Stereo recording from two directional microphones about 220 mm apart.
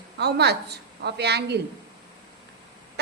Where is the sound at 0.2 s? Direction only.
50° right (ahead or behind).